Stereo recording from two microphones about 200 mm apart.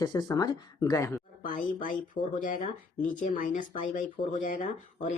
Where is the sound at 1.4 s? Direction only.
45° left (ahead or behind).